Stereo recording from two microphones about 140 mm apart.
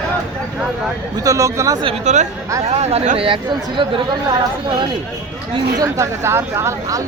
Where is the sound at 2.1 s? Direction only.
55° right (ahead or behind).